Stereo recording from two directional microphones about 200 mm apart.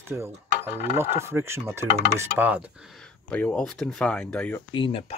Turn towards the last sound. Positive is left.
turn(degrees=25)  # may be behind; listen again after turning